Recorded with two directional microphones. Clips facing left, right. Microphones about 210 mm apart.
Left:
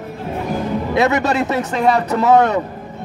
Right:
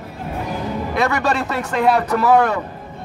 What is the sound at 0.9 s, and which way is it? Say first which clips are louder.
Speech: left 4 dB; 20° left (ahead or behind).